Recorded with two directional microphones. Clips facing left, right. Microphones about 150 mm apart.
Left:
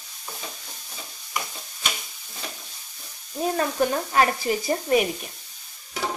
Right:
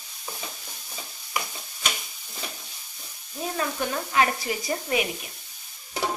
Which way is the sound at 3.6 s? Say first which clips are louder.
Left 4 dB; 40° left (ahead or behind).